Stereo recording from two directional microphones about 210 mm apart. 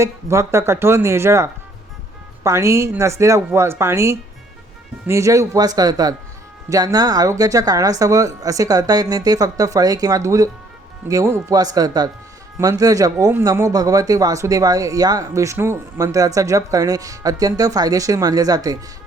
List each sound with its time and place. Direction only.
0.0 s speech: 15° right (ahead or behind)